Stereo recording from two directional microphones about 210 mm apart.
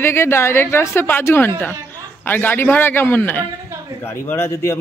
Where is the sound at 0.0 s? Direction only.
10° left (ahead or behind).